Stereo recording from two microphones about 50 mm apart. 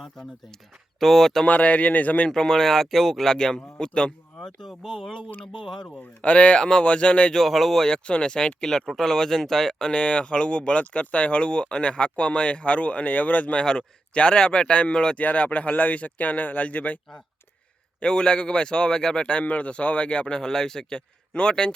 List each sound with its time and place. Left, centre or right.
0.9 s speech: centre
1.5 s speech: left
2.3 s speech: centre
3.3 s speech: centre
4.6 s speech: centre
6.0 s a man's voice: left
7.3 s speech: centre
8.6 s speech: centre
9.9 s a man's voice: left
15.2 s speech: left
18.0 s a man's voice: centre